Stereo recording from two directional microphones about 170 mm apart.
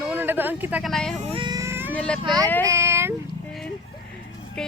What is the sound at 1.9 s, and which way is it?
Speech, 5° left (ahead or behind).